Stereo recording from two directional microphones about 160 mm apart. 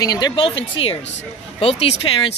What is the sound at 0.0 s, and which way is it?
A man's voice, 25° left (ahead or behind).